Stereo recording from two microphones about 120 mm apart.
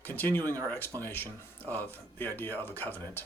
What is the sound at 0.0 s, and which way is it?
Speech, 15° left (ahead or behind).